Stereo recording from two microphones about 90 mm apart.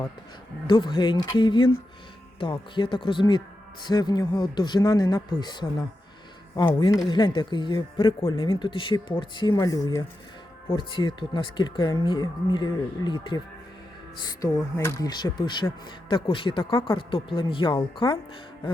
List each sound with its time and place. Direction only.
0.7 s speech: 60° left (ahead or behind)
9.6 s speech: 40° left (ahead or behind)
10.7 s speech: 65° left (ahead or behind)
14.8 s speech: 30° left (ahead or behind)
15.0 s speech: 55° left (ahead or behind); by 18.2 s 70° left (ahead or behind)